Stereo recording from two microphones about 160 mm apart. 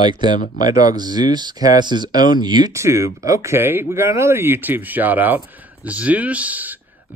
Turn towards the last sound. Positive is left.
turn(degrees=-10)  # may be behind; listen again after turning